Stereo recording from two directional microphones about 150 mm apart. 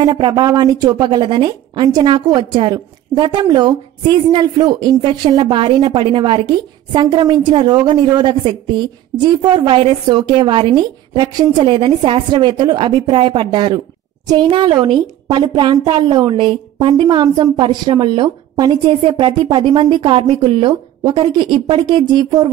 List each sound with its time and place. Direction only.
0.0 s a woman's voice: 30° right (ahead or behind)